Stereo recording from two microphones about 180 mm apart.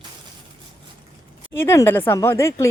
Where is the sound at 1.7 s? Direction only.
10° left (ahead or behind).